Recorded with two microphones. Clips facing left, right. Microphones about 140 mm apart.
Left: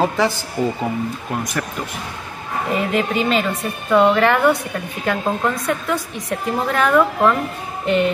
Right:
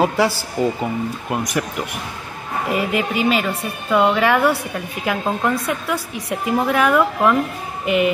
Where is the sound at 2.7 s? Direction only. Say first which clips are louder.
Left 1 dB; 5° right (ahead or behind).